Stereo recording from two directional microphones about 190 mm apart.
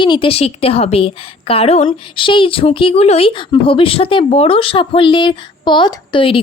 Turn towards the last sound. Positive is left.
turn(degrees=30)  # may be behind; listen again after turning